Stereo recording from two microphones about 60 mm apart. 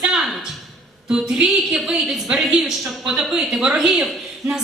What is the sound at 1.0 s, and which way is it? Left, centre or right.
A woman's voice, centre.